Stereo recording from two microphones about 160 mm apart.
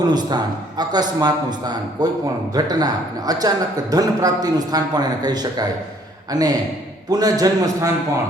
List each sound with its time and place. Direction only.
0.1 s speech: 25° right (ahead or behind)